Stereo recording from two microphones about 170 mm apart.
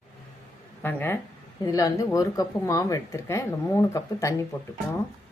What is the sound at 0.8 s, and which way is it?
Speech, 10° left (ahead or behind).